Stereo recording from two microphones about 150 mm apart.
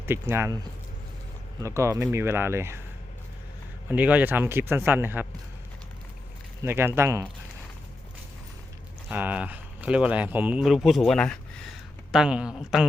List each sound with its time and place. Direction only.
0.0 s speech: 15° right (ahead or behind)
1.6 s speech: 20° right (ahead or behind)
3.8 s speech: 10° right (ahead or behind)
6.7 s speech: 15° right (ahead or behind)
9.0 s speech: 10° right (ahead or behind)